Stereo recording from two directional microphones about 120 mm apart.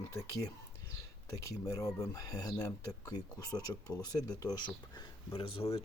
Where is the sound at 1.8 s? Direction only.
30° left (ahead or behind).